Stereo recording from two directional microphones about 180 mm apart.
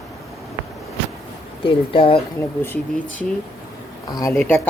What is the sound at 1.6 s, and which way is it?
Speech, 30° left (ahead or behind).